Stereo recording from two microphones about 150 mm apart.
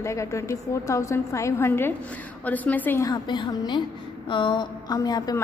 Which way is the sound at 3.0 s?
30° left (ahead or behind).